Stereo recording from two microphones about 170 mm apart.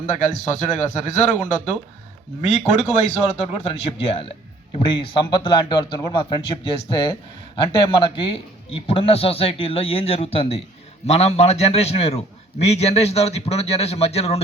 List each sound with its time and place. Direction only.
0.1 s a man's voice: 45° left (ahead or behind)